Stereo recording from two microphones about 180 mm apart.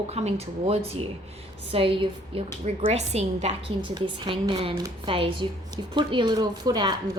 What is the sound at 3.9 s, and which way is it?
Speech, 25° right (ahead or behind).